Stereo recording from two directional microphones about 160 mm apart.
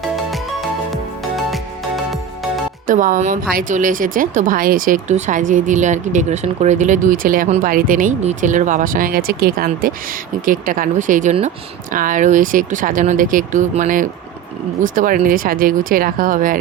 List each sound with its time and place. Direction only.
2.8 s speech: 55° right (ahead or behind)
10.4 s speech: 60° right (ahead or behind)